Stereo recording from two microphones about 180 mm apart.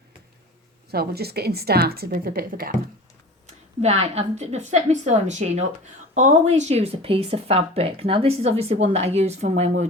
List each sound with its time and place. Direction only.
0.9 s a woman's voice: 60° right (ahead or behind)
3.4 s speech: 35° right (ahead or behind)